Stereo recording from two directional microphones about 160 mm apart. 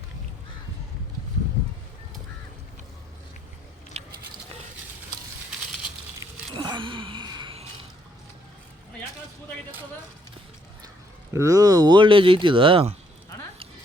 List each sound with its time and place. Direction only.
3.9 s biting: 40° right (ahead or behind)
6.5 s a sound: 30° right (ahead or behind)
11.3 s speech: 20° right (ahead or behind); by 13.0 s 35° right (ahead or behind)